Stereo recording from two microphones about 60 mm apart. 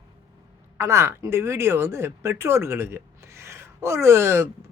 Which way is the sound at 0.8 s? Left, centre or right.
Right.